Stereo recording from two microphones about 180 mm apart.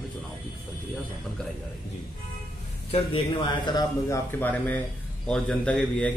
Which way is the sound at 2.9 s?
30° left (ahead or behind).